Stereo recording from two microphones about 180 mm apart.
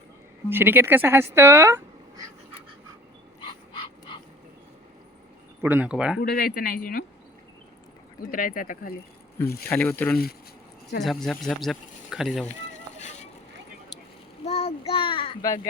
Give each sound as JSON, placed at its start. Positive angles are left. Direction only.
{"t": 0.5, "sound": "speech", "side_deg": -10}
{"t": 5.6, "sound": "speech", "side_deg": -10}
{"t": 6.1, "sound": "speech", "side_deg": 60}
{"t": 8.3, "sound": "speech", "side_deg": 50}
{"t": 9.6, "sound": "speech", "side_deg": 10}
{"t": 13.0, "sound": "vehicle", "side_deg": 40}
{"t": 14.4, "sound": "a child's voice", "side_deg": 35}